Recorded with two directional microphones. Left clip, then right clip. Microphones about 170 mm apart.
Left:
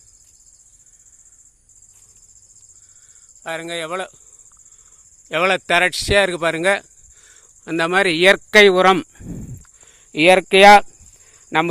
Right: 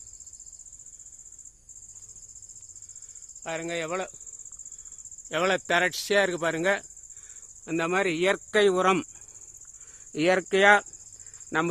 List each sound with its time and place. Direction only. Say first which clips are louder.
3.4 s speech: left 6 dB; 20° left (ahead or behind)
5.3 s speech: left 8 dB; 20° left (ahead or behind)
10.1 s speech: left 11 dB; 15° left (ahead or behind)